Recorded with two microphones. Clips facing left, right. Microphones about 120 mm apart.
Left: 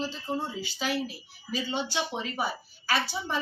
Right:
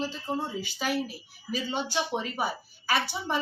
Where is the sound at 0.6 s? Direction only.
10° right (ahead or behind).